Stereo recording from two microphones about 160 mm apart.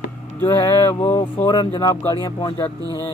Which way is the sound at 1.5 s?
30° left (ahead or behind).